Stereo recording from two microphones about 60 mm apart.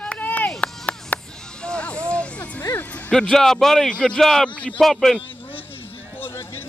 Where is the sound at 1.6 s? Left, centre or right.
Centre.